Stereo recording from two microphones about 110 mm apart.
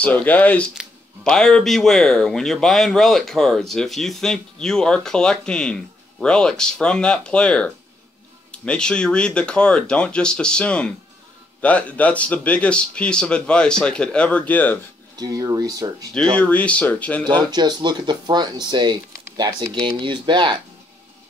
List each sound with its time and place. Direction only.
0.0 s speech: 15° left (ahead or behind)
15.1 s speech: 35° right (ahead or behind)
16.1 s speech: 10° left (ahead or behind)
17.4 s speech: 40° right (ahead or behind)